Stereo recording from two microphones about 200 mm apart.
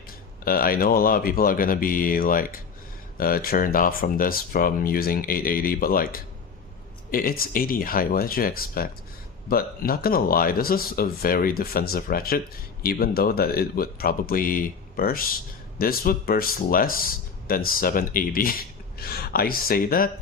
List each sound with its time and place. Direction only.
0.4 s speech: 45° left (ahead or behind)